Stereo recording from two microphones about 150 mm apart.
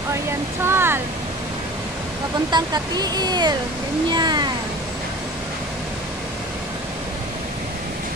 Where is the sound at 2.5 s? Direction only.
25° right (ahead or behind).